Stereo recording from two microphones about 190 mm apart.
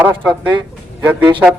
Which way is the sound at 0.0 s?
10° right (ahead or behind).